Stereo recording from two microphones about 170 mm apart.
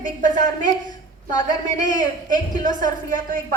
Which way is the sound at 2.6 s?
50° right (ahead or behind).